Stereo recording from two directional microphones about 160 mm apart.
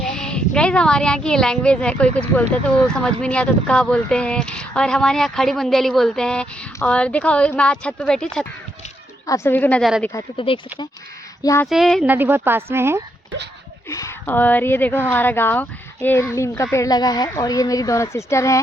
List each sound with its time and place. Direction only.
0.0 s speech: 5° left (ahead or behind)
9.2 s speech: 20° left (ahead or behind)
10.0 s speech: 20° left (ahead or behind)
10.3 s speech: 35° left (ahead or behind)
11.4 s speech: 15° left (ahead or behind)
11.7 s speech: centre (ahead or behind)
12.0 s a woman's voice: 10° right (ahead or behind)
13.9 s speech: 20° left (ahead or behind)